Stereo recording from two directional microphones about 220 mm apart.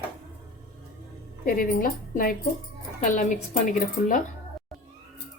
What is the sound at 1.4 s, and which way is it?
A woman's voice, 40° left (ahead or behind).